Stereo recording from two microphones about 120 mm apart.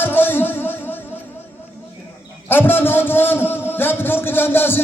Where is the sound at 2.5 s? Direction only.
15° left (ahead or behind).